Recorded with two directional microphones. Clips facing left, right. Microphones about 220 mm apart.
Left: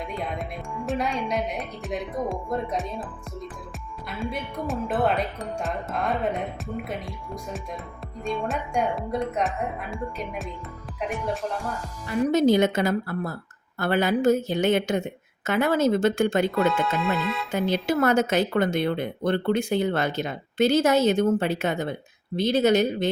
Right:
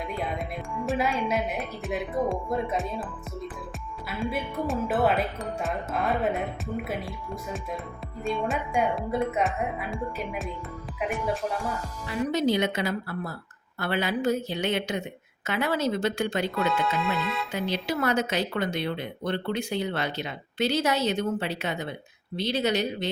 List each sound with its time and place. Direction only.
0.2 s music: centre (ahead or behind)
0.9 s speech: 5° right (ahead or behind)
8.2 s speech: centre (ahead or behind)
12.0 s speech: 45° left (ahead or behind)
16.6 s speech: centre (ahead or behind)
17.8 s speech: 50° left (ahead or behind)